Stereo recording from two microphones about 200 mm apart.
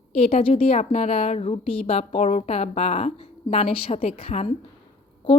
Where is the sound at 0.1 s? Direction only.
30° left (ahead or behind).